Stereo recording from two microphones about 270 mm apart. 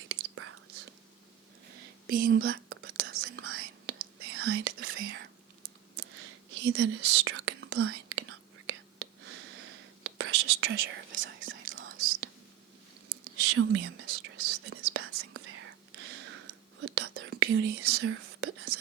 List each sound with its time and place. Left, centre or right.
0.1 s whispering: right
2.0 s whispering: right
3.1 s whispering: right
3.9 s whispering: right
13.4 s whispering: right